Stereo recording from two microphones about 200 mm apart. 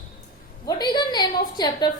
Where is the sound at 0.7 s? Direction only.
20° left (ahead or behind).